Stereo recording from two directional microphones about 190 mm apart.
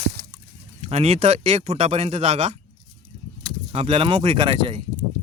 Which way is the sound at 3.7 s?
30° right (ahead or behind).